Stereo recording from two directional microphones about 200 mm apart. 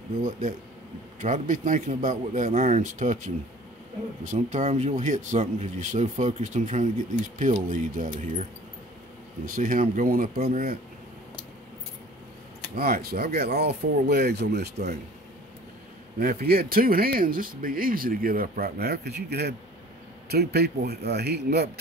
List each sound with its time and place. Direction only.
0.2 s speech: 45° right (ahead or behind)
9.5 s speech: 45° right (ahead or behind)
12.7 s speech: 50° right (ahead or behind)
16.2 s speech: 50° right (ahead or behind)